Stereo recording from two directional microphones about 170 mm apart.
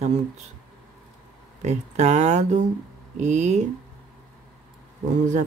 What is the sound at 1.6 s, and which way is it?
Speech, 40° right (ahead or behind).